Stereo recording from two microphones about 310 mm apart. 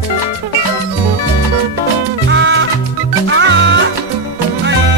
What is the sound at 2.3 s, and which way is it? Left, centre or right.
Music, right.